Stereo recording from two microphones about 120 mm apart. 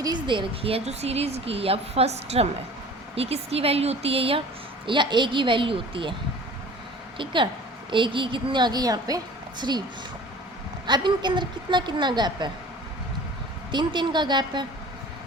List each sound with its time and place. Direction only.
0.0 s speech: 40° right (ahead or behind)
4.9 s a woman's voice: 40° right (ahead or behind)
7.9 s a woman's voice: 45° right (ahead or behind)
10.8 s a woman's voice: 40° right (ahead or behind)
13.7 s a woman's voice: 40° right (ahead or behind)